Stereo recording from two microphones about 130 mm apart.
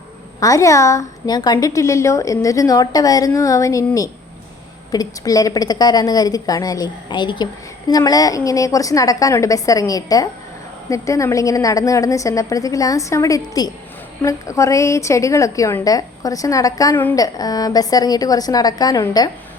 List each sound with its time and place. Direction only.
0.3 s a woman's voice: 25° left (ahead or behind)
4.9 s a woman's voice: 30° left (ahead or behind)